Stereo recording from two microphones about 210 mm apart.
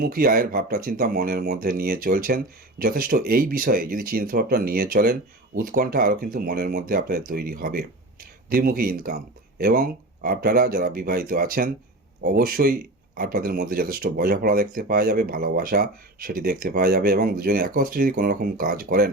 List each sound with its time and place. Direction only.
0.0 s speech: 45° right (ahead or behind)